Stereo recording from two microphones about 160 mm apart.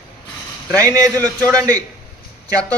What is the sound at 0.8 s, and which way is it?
A man's voice, 20° right (ahead or behind).